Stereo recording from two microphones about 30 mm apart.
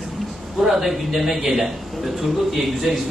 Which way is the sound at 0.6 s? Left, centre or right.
Centre.